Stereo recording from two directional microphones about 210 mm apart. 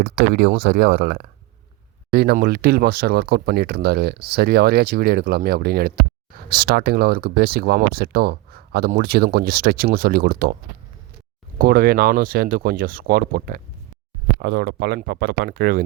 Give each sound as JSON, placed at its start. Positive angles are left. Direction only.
{"t": 0.0, "sound": "speech", "side_deg": -50}